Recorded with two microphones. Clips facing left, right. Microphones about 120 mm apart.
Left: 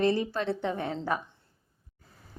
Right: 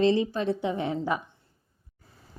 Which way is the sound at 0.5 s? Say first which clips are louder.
Right 3 dB; 15° right (ahead or behind).